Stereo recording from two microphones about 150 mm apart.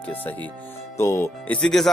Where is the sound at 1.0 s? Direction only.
15° left (ahead or behind).